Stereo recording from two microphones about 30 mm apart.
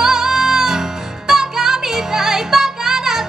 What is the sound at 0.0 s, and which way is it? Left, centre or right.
Music, centre.